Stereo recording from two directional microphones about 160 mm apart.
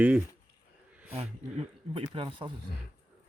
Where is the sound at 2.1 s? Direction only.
35° right (ahead or behind).